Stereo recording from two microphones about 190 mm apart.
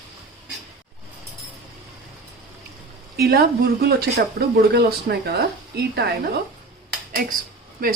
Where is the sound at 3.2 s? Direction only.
55° right (ahead or behind).